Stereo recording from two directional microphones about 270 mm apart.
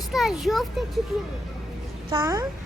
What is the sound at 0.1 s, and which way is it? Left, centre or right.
Speech, centre.